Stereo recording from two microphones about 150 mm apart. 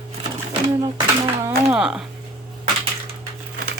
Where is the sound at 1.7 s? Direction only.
5° right (ahead or behind).